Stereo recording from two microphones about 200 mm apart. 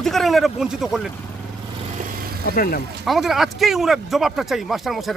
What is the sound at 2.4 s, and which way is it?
Speech, 45° left (ahead or behind).